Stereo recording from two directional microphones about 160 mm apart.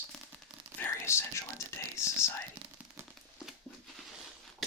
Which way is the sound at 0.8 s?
15° left (ahead or behind).